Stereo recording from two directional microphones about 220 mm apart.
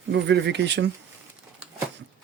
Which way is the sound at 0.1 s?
50° right (ahead or behind).